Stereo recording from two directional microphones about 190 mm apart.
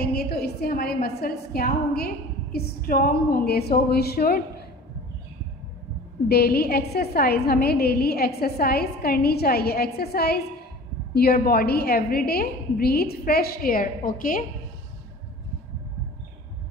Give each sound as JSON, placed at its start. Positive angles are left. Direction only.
{"t": 0.0, "sound": "a woman's voice", "side_deg": 55}
{"t": 6.2, "sound": "a woman's voice", "side_deg": 55}